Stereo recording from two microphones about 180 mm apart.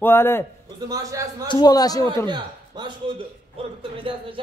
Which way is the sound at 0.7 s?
20° right (ahead or behind).